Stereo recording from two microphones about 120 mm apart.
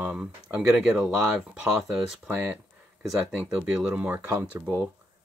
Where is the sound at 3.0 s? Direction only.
10° right (ahead or behind).